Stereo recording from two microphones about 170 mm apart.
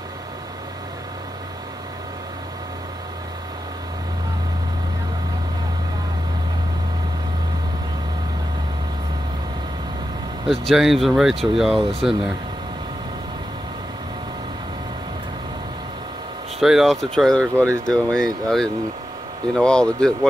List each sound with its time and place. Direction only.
10.5 s speech: centre (ahead or behind)
16.5 s speech: centre (ahead or behind)